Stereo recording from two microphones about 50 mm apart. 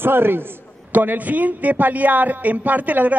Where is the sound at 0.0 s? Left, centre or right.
Right.